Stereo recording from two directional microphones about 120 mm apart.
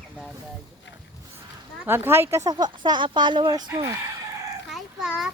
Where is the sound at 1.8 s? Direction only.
20° right (ahead or behind).